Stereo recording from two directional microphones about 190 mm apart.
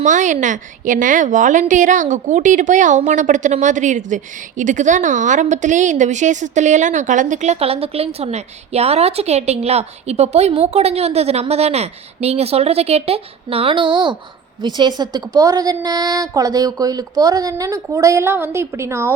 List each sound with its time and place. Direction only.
0.0 s a woman's voice: 40° right (ahead or behind); by 19.1 s 15° right (ahead or behind)